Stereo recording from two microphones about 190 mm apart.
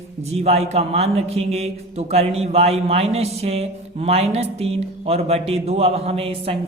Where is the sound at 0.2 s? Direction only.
35° right (ahead or behind).